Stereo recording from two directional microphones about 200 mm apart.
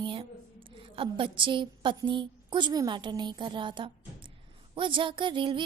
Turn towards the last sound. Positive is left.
turn(degrees=-25)  # may be behind; listen again after turning